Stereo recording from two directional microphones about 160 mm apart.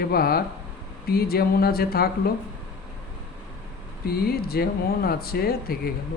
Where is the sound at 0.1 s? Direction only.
70° left (ahead or behind).